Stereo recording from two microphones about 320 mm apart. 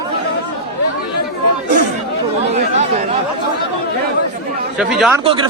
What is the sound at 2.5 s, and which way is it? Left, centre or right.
Chatter, right.